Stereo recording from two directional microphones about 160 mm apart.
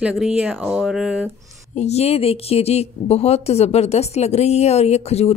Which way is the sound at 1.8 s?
40° left (ahead or behind).